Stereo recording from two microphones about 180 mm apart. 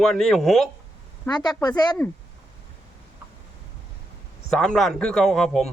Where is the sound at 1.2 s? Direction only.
25° left (ahead or behind).